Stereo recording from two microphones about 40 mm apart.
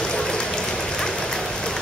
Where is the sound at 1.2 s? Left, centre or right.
Centre.